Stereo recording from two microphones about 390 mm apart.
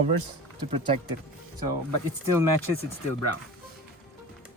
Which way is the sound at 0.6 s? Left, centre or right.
Centre.